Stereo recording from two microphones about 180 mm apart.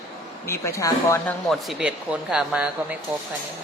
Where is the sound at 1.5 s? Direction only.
Centre (ahead or behind).